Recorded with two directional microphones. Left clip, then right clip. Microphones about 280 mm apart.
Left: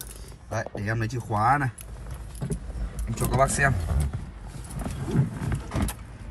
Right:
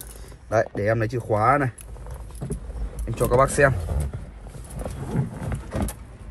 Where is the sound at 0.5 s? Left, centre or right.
Centre.